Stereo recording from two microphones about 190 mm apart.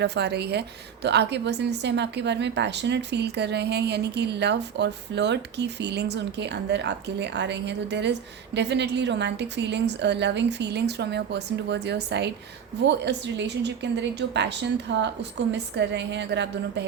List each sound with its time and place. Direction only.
0.0 s a woman's voice: 65° right (ahead or behind)